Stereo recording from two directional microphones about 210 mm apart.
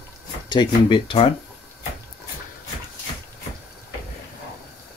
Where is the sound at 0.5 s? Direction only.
20° left (ahead or behind).